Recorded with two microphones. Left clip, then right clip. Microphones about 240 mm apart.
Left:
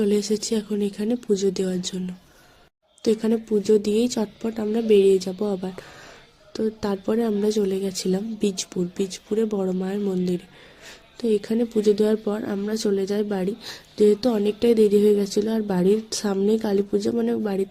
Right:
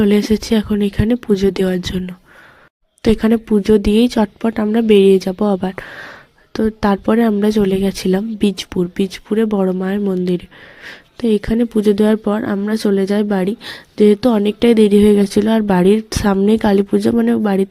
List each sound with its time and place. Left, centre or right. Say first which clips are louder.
0.0 s speech: right 7 dB; right